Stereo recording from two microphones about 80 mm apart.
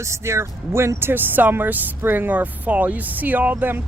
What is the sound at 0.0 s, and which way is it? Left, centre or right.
Speech, right.